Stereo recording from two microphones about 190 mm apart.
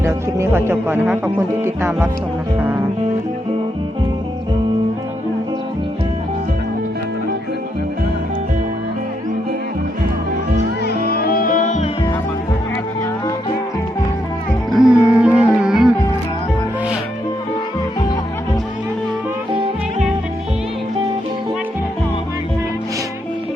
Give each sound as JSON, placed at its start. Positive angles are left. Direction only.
{"t": 0.0, "sound": "speech", "side_deg": -15}
{"t": 2.6, "sound": "music", "side_deg": -10}
{"t": 10.8, "sound": "music", "side_deg": 55}
{"t": 14.7, "sound": "music", "side_deg": -5}